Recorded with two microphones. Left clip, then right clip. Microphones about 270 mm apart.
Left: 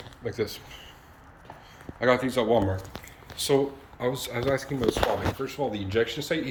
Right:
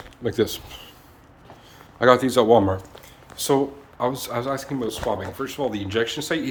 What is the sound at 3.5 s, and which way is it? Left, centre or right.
Speech, centre.